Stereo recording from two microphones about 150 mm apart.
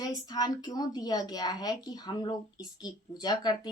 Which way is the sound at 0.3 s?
25° left (ahead or behind).